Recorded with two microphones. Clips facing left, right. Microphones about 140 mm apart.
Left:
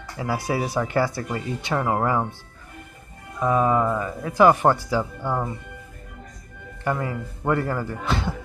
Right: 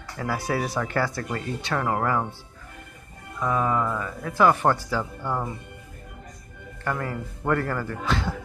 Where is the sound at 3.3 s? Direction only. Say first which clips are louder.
Left 4 dB; 25° left (ahead or behind).